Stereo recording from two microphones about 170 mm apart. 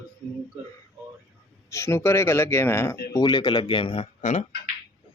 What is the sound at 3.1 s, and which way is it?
Speech, 25° left (ahead or behind).